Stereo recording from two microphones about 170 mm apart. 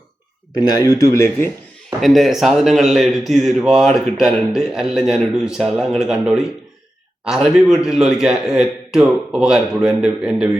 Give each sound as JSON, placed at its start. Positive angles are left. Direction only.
{"t": 0.7, "sound": "speech", "side_deg": 20}
{"t": 2.0, "sound": "a man's voice", "side_deg": 0}